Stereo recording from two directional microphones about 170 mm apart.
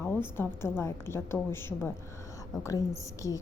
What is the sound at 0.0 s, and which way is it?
A woman's voice, 15° left (ahead or behind).